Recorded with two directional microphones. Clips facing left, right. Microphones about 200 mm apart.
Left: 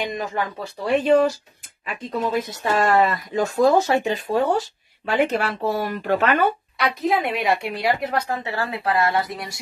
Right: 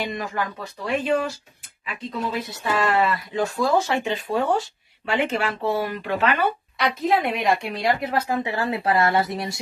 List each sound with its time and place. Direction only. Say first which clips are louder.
0.0 s speech: left 2 dB; 20° left (ahead or behind)
0.8 s speech: left 6 dB; 40° left (ahead or behind)
6.8 s a woman's voice: even; centre (ahead or behind); by 9.6 s 25° right (ahead or behind)